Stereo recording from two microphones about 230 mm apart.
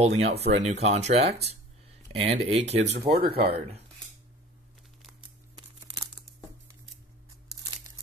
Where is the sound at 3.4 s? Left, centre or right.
Right.